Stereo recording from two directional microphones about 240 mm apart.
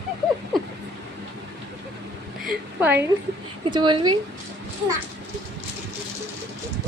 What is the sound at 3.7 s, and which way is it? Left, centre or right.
Speech, centre.